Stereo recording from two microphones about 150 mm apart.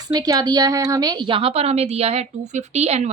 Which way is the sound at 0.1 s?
25° right (ahead or behind).